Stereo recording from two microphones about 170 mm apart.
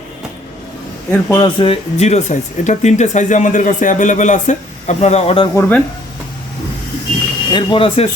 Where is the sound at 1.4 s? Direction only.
30° left (ahead or behind).